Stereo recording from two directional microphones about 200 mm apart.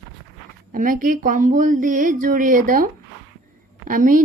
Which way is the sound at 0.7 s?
45° right (ahead or behind).